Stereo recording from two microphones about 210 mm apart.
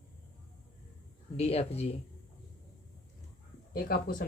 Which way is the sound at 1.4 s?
30° left (ahead or behind).